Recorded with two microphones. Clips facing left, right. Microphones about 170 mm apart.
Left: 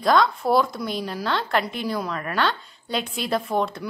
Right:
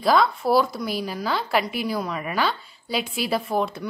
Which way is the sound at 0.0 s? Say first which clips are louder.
Even; 5° right (ahead or behind).